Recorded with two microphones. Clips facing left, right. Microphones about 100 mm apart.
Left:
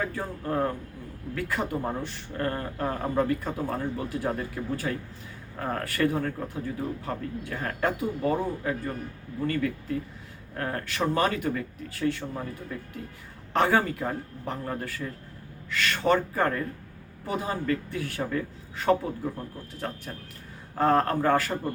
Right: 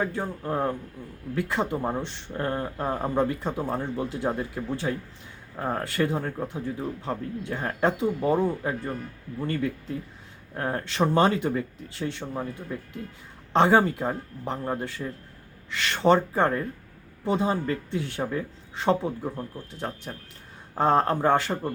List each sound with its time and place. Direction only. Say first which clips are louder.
0.0 s speech: right 2 dB; 25° right (ahead or behind)